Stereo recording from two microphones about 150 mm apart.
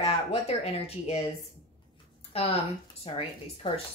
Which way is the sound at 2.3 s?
40° left (ahead or behind).